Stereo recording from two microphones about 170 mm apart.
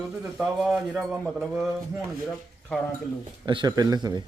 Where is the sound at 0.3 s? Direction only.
5° right (ahead or behind).